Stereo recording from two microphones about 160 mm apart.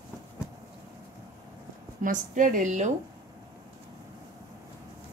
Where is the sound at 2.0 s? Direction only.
55° right (ahead or behind).